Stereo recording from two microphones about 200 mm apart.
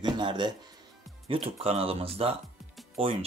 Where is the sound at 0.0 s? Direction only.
25° right (ahead or behind).